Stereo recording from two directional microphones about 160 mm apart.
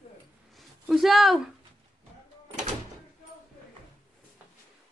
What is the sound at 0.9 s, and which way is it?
Speech, centre (ahead or behind).